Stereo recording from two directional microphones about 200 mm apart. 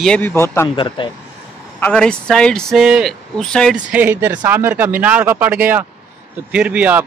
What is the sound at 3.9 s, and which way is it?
Speech, 10° right (ahead or behind).